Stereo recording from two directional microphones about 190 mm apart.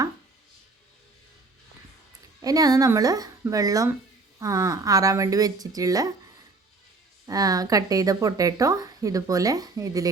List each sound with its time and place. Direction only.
2.4 s a woman's voice: 20° right (ahead or behind)
7.3 s a woman's voice: 20° right (ahead or behind)